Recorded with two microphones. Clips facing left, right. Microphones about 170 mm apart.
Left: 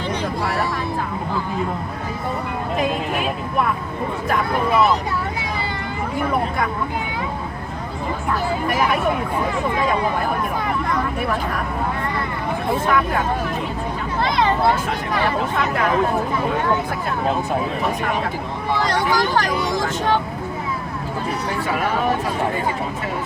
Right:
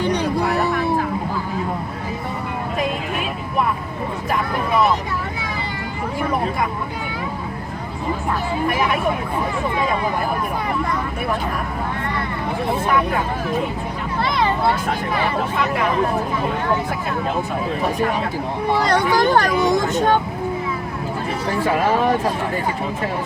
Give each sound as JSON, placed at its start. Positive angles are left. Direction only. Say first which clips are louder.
{"t": 18.9, "sound": "speech", "louder": "right 4 dB", "side_deg": -55}